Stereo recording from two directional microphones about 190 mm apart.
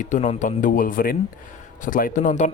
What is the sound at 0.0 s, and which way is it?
Speech, 40° left (ahead or behind).